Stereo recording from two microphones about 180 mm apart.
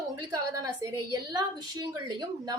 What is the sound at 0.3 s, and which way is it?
A woman's voice, 20° right (ahead or behind).